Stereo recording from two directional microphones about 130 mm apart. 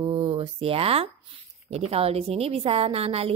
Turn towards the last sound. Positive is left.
turn(degrees=-50)  # may be behind; listen again after turning